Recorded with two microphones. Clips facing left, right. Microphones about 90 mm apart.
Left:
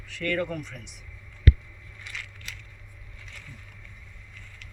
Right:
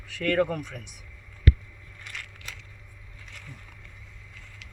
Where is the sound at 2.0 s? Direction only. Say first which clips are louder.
Left 1 dB; 50° right (ahead or behind).